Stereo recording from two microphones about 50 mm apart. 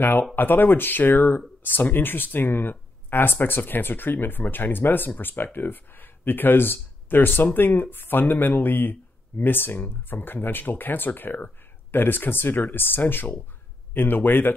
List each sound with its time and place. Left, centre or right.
0.0 s speech: left